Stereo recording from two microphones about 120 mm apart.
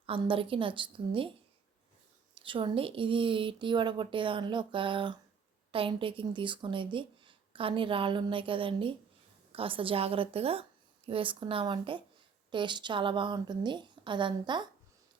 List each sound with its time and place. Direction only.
0.0 s a woman's voice: 45° right (ahead or behind)
2.3 s a woman's voice: 45° right (ahead or behind)